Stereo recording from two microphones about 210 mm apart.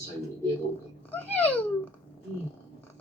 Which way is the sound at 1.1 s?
10° left (ahead or behind).